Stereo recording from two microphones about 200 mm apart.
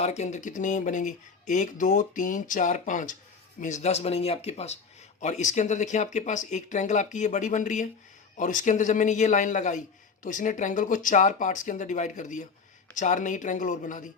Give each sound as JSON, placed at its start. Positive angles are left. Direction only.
{"t": 0.0, "sound": "speech", "side_deg": 35}